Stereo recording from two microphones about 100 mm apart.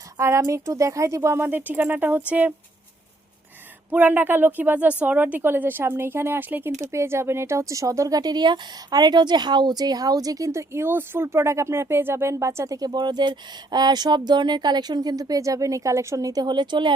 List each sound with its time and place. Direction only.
0.2 s speech: 30° right (ahead or behind)
3.9 s speech: 15° right (ahead or behind); by 16.9 s 50° right (ahead or behind)